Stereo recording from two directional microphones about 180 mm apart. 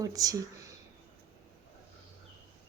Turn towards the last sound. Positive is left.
turn(degrees=-20)  # may be behind; listen again after turning